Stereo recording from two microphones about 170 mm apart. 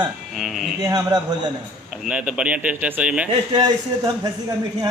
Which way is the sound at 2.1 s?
5° right (ahead or behind).